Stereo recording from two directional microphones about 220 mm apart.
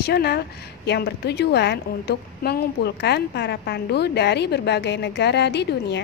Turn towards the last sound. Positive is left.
turn(degrees=50)  # may be behind; listen again after turning